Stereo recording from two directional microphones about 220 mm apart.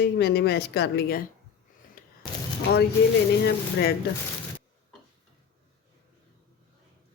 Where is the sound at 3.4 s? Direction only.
45° left (ahead or behind).